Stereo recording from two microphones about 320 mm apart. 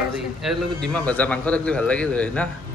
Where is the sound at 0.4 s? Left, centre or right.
Centre.